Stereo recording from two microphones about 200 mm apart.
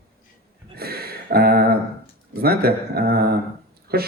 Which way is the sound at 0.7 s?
50° right (ahead or behind).